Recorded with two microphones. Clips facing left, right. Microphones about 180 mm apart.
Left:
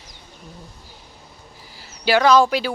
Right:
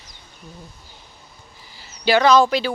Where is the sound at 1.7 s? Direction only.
5° left (ahead or behind).